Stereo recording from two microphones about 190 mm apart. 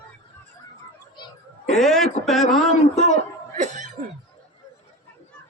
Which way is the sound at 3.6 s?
40° right (ahead or behind).